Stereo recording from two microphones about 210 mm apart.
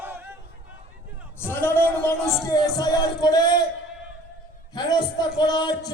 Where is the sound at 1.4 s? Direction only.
10° left (ahead or behind).